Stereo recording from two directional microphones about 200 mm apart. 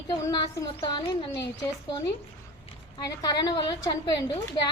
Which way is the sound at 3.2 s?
20° left (ahead or behind).